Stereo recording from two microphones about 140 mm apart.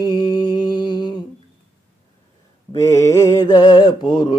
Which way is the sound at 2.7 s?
20° left (ahead or behind).